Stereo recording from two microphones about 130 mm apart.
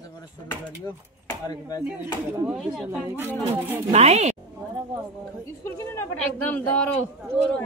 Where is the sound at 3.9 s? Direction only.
55° right (ahead or behind).